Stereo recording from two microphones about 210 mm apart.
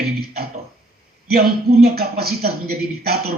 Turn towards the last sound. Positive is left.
turn(degrees=-50)  # may be behind; listen again after turning